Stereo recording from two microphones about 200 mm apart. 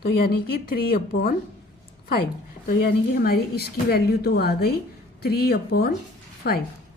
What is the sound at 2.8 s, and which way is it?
A woman's voice, 50° left (ahead or behind).